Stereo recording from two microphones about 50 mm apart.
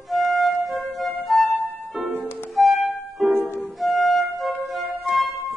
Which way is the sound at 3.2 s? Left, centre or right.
Right.